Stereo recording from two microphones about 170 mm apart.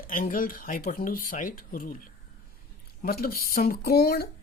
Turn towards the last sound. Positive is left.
turn(degrees=65)  # may be behind; listen again after turning